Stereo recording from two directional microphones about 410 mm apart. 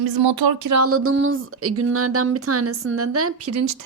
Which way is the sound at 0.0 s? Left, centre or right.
Right.